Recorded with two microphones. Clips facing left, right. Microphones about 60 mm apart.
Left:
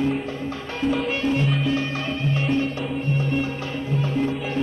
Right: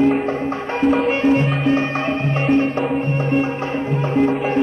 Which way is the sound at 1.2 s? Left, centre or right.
Right.